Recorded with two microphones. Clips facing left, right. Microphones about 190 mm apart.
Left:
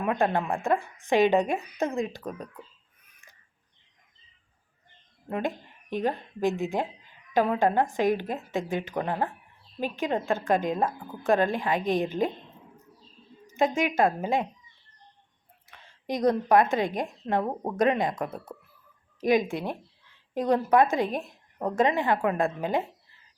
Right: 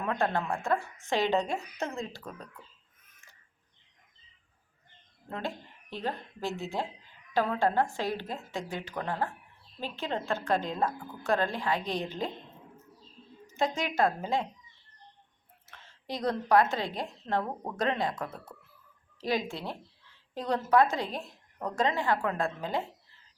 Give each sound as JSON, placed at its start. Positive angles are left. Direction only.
{"t": 0.0, "sound": "a woman's voice", "side_deg": 15}
{"t": 5.3, "sound": "a woman's voice", "side_deg": 15}
{"t": 13.6, "sound": "a woman's voice", "side_deg": 15}
{"t": 15.7, "sound": "a sound", "side_deg": 15}
{"t": 16.0, "sound": "a woman's voice", "side_deg": 15}